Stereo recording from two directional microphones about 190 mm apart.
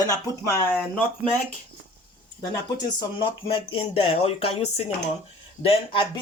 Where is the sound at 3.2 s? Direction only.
25° left (ahead or behind).